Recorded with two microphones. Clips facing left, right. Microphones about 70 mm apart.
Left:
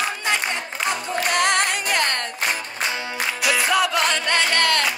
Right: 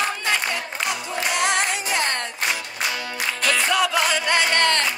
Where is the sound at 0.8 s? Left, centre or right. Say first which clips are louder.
Left 3 dB; left.